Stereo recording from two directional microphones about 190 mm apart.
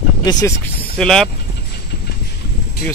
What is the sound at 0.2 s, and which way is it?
Speech, 20° left (ahead or behind).